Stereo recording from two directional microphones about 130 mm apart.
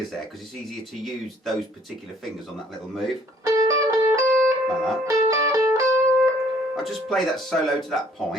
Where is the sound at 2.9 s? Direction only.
Centre (ahead or behind).